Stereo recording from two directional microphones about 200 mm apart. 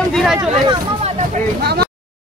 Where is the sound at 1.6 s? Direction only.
55° right (ahead or behind).